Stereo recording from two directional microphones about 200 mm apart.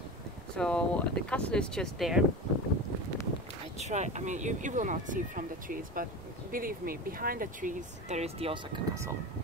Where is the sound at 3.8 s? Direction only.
35° right (ahead or behind).